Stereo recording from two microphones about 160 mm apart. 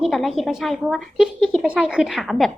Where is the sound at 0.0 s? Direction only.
Centre (ahead or behind).